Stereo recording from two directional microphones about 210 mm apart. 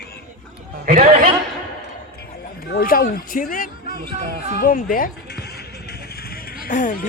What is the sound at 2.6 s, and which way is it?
Speech, 45° left (ahead or behind).